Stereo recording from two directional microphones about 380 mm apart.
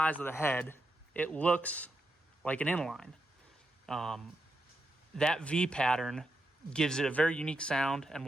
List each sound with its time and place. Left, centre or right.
0.0 s a man's voice: centre